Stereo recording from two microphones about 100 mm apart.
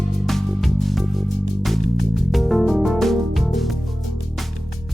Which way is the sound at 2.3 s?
Centre (ahead or behind).